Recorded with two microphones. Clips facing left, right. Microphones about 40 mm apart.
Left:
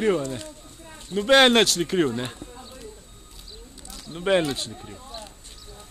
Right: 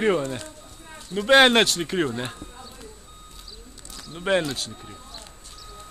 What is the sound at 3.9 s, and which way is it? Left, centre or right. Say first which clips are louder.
Speech: left 1 dB; centre.